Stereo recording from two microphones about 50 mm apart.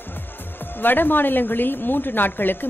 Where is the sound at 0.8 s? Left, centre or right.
Left.